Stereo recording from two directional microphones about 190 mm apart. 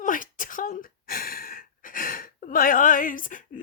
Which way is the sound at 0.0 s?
45° left (ahead or behind).